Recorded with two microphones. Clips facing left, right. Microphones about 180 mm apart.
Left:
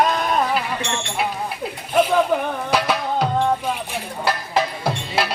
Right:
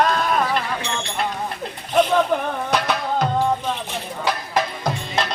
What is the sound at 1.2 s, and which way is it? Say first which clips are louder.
Music: left 1 dB; 5° left (ahead or behind).